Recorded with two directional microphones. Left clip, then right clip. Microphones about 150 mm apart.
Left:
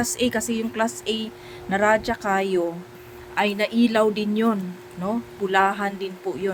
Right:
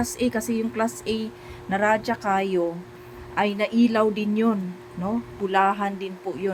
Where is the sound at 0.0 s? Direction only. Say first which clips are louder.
Left 2 dB; 20° left (ahead or behind).